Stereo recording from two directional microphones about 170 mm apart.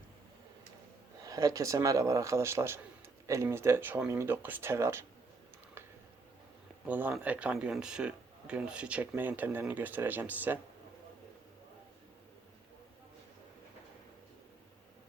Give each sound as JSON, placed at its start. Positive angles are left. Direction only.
{"t": 1.2, "sound": "a man's voice", "side_deg": -20}
{"t": 6.8, "sound": "speech", "side_deg": -10}